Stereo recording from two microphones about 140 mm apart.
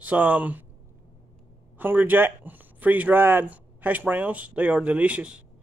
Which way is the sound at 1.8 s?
15° right (ahead or behind).